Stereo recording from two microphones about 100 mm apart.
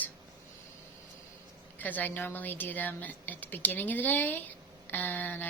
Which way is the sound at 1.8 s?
15° left (ahead or behind).